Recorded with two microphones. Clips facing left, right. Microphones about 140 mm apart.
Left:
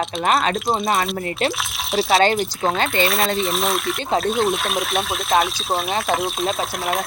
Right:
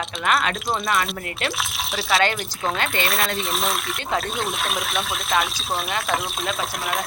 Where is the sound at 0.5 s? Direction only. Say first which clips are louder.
Left 3 dB; centre (ahead or behind).